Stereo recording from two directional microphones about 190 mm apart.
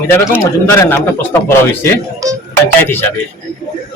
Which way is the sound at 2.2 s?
20° right (ahead or behind).